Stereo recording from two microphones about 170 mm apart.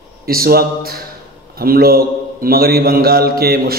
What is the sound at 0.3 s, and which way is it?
A man's voice, 60° right (ahead or behind).